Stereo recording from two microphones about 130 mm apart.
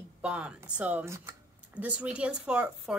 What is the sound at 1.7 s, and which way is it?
Speech, 10° right (ahead or behind).